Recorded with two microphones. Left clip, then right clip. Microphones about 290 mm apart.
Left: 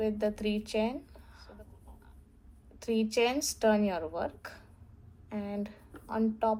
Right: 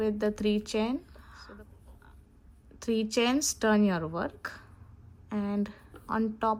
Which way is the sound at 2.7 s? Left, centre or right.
Right.